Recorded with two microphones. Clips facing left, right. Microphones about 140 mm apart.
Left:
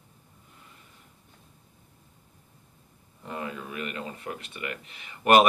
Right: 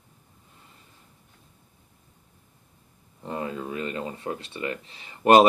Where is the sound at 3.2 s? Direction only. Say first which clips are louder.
Right 4 dB; 30° right (ahead or behind).